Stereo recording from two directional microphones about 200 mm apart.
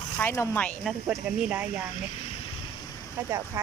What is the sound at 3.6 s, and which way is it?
Speech, 15° right (ahead or behind).